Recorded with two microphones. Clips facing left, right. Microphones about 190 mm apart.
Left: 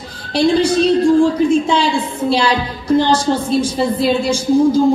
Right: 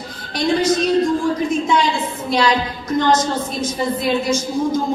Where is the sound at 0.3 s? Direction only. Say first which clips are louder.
Left 4 dB; 30° left (ahead or behind).